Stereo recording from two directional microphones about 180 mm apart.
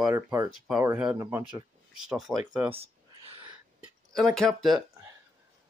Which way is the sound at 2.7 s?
30° right (ahead or behind).